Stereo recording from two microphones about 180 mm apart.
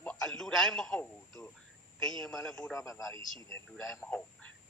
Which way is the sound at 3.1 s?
15° left (ahead or behind).